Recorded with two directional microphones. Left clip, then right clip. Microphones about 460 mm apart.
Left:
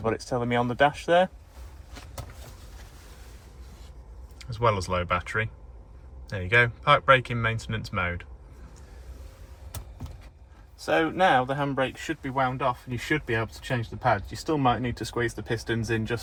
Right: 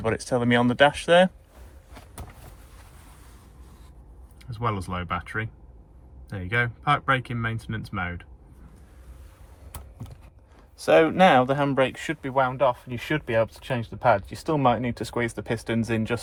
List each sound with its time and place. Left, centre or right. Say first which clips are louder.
0.2 s speech: right 4 dB; centre
4.4 s speech: left 4 dB; centre
10.8 s speech: right 6 dB; centre